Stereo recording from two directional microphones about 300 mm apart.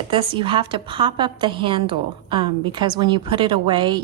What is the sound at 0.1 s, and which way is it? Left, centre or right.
A woman's voice, centre.